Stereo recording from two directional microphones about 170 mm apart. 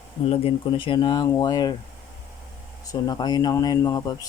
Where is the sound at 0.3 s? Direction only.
30° left (ahead or behind).